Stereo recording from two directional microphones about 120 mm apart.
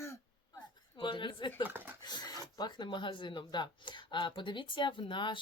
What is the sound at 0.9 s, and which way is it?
Speech, 45° left (ahead or behind).